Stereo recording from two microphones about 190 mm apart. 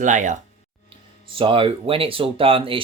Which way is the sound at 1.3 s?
25° right (ahead or behind).